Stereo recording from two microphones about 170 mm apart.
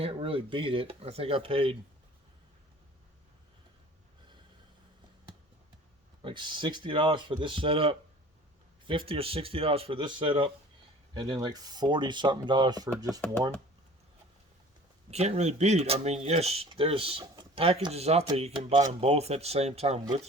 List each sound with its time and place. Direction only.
0.0 s speech: 35° right (ahead or behind)
6.2 s speech: 25° right (ahead or behind)
15.1 s speech: 40° right (ahead or behind)